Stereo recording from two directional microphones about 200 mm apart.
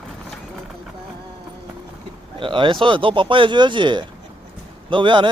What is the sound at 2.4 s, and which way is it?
Speech, 25° right (ahead or behind).